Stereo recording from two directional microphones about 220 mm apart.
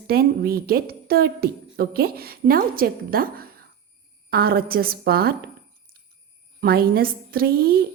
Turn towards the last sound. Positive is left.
turn(degrees=-45)  # may be behind; listen again after turning